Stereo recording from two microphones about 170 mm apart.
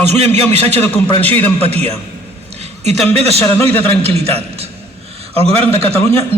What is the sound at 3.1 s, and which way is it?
A man's voice, 35° right (ahead or behind).